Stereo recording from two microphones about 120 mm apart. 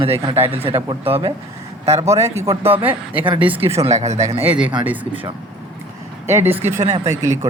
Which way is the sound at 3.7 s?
65° right (ahead or behind).